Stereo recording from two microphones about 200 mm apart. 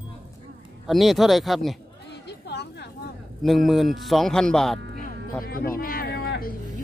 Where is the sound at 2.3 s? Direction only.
60° left (ahead or behind).